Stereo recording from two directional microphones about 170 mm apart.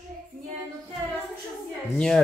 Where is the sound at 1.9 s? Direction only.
5° left (ahead or behind).